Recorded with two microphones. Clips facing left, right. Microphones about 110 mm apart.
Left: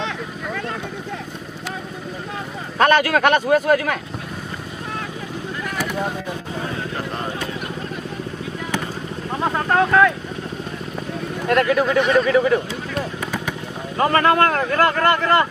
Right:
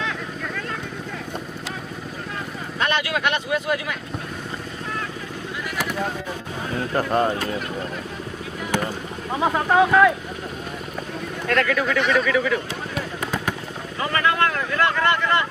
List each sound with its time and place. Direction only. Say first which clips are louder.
2.8 s speech: left 8 dB; 50° left (ahead or behind)
9.3 s speech: right 1 dB; 5° right (ahead or behind)
11.4 s speech: left 4 dB; 30° left (ahead or behind)
13.9 s speech: left 6 dB; 40° left (ahead or behind)